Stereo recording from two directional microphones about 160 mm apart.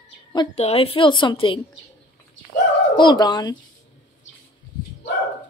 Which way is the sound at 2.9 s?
25° left (ahead or behind).